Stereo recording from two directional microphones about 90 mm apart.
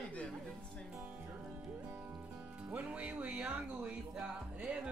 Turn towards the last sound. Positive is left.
turn(degrees=-5)  # may be behind; listen again after turning